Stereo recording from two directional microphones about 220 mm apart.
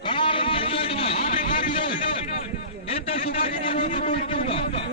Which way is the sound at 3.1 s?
25° left (ahead or behind).